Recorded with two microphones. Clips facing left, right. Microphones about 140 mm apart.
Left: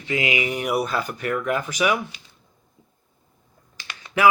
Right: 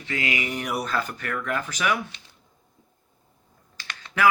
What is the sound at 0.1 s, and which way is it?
Speech, 15° left (ahead or behind).